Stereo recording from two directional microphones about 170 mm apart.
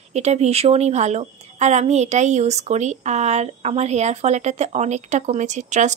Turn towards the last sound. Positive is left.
turn(degrees=-45)  # may be behind; listen again after turning